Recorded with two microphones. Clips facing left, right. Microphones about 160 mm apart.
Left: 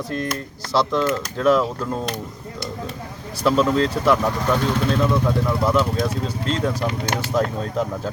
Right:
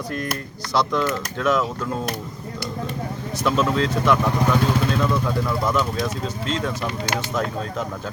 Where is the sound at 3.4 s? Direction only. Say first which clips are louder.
Left 3 dB; 35° left (ahead or behind).